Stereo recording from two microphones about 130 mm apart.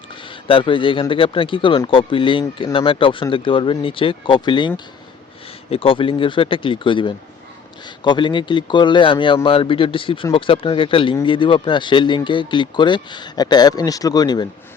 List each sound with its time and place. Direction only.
0.3 s speech: 40° left (ahead or behind)
5.7 s speech: 45° left (ahead or behind)